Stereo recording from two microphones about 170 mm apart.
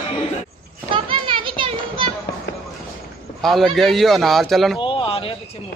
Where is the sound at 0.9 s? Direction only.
30° right (ahead or behind).